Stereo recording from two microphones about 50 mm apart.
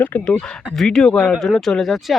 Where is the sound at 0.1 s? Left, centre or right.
Left.